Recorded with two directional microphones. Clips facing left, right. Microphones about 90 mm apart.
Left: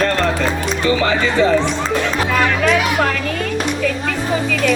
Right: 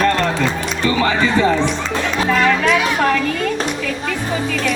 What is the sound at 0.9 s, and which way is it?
Speech, 35° right (ahead or behind).